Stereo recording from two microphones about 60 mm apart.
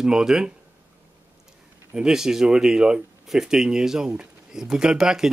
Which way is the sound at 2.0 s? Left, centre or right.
Centre.